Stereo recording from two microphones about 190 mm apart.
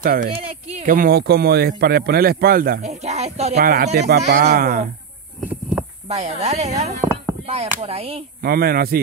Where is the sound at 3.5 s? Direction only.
55° right (ahead or behind).